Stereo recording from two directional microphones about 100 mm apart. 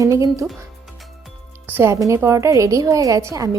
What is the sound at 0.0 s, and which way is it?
Speech, 35° right (ahead or behind).